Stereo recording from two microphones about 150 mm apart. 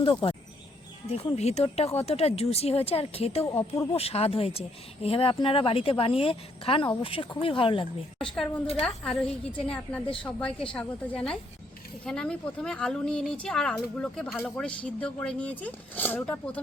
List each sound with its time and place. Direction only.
0.0 s speech: 35° left (ahead or behind)
3.4 s speech: 20° left (ahead or behind)
3.9 s speech: 40° left (ahead or behind)
8.2 s a woman's voice: 5° left (ahead or behind)